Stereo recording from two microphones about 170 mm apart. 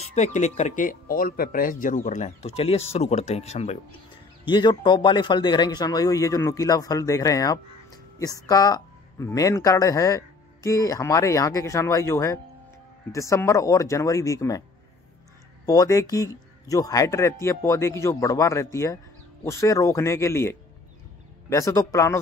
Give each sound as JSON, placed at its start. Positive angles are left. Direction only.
{"t": 0.1, "sound": "speech", "side_deg": 45}
{"t": 4.5, "sound": "speech", "side_deg": 25}
{"t": 15.6, "sound": "speech", "side_deg": 20}